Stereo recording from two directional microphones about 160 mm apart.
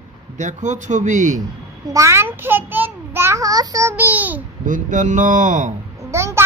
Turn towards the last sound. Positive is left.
turn(degrees=-15)  # may be behind; listen again after turning